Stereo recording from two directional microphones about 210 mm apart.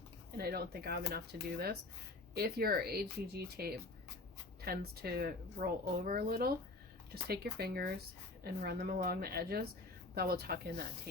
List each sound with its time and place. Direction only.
0.3 s speech: 50° right (ahead or behind)